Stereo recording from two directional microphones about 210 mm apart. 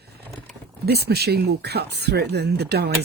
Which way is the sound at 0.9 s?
50° right (ahead or behind).